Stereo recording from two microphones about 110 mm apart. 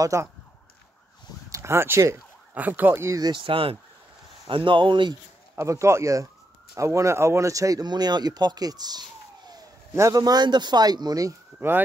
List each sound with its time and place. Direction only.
0.0 s speech: 25° right (ahead or behind)
1.5 s speech: 25° right (ahead or behind)
2.5 s speech: 15° right (ahead or behind)
3.2 s speech: 40° right (ahead or behind)
3.4 s speech: 55° right (ahead or behind)
5.6 s a man's voice: 25° right (ahead or behind)